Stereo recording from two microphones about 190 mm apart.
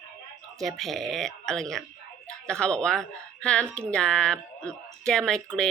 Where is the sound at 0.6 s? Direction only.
Centre (ahead or behind).